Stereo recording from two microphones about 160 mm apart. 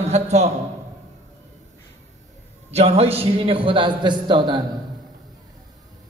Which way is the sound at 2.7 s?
40° right (ahead or behind).